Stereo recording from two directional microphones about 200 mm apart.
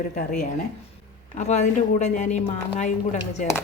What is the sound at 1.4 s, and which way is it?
A woman's voice, 35° left (ahead or behind).